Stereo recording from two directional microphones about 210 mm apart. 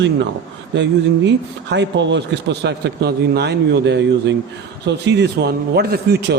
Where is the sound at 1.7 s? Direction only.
55° right (ahead or behind).